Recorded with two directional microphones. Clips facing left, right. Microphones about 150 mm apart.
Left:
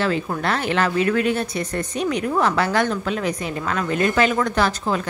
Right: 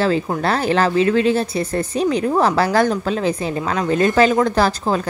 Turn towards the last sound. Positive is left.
turn(degrees=-35)  # may be behind; listen again after turning